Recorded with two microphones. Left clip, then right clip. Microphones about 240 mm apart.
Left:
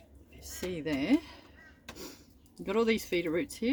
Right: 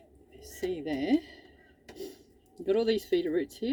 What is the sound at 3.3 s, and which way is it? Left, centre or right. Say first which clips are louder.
Speech: right 1 dB; left.